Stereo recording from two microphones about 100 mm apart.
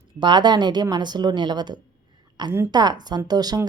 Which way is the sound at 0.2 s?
50° right (ahead or behind).